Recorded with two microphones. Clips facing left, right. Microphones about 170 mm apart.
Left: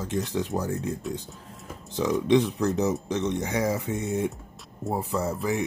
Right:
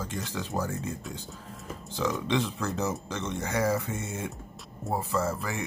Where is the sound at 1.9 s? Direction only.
20° left (ahead or behind).